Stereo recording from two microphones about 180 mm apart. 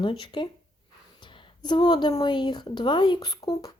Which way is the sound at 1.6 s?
25° left (ahead or behind).